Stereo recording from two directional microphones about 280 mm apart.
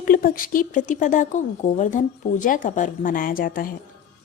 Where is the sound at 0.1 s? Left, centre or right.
Left.